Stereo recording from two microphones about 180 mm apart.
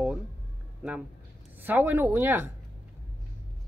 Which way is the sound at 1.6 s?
10° right (ahead or behind).